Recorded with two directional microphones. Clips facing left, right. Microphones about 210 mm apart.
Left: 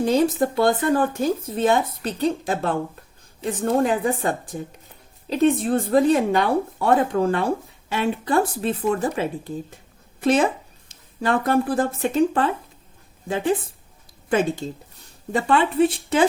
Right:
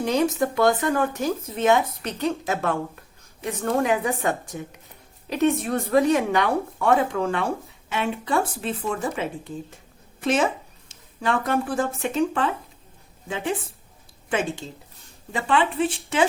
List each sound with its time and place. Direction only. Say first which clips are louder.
0.0 s speech: left 3 dB; 35° left (ahead or behind)